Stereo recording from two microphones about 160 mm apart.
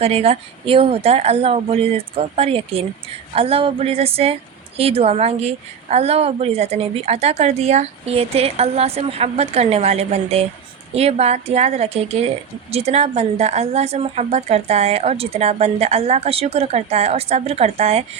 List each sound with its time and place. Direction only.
0.0 s a woman's voice: 40° right (ahead or behind)